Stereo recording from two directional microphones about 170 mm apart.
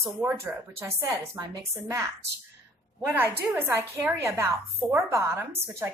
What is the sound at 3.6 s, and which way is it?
A woman's voice, 15° right (ahead or behind).